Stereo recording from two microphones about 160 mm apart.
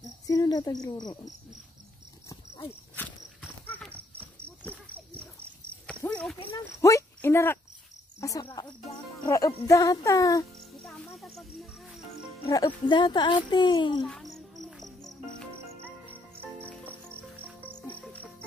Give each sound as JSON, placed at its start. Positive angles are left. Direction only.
{"t": 0.3, "sound": "speech", "side_deg": 25}
{"t": 2.2, "sound": "horse", "side_deg": 20}
{"t": 6.0, "sound": "a sound", "side_deg": 10}
{"t": 6.5, "sound": "speech", "side_deg": 20}
{"t": 8.2, "sound": "cricket", "side_deg": 20}
{"t": 9.2, "sound": "music", "side_deg": 20}
{"t": 9.7, "sound": "speech", "side_deg": 20}
{"t": 10.8, "sound": "music", "side_deg": 0}
{"t": 12.4, "sound": "speech", "side_deg": 25}
{"t": 14.0, "sound": "cricket", "side_deg": 0}
{"t": 16.1, "sound": "music", "side_deg": -15}
{"t": 16.8, "sound": "cricket", "side_deg": -10}
{"t": 17.8, "sound": "music", "side_deg": 10}